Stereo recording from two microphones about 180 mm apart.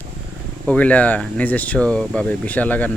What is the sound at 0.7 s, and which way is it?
Speech, 5° left (ahead or behind).